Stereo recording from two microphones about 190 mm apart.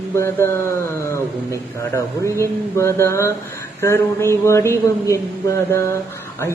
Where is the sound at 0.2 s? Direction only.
15° left (ahead or behind).